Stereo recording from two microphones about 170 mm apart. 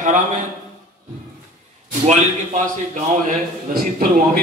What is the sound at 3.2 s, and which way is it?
Speech, 55° right (ahead or behind).